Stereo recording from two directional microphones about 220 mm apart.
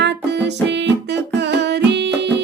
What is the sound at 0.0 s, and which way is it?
Music, 50° right (ahead or behind).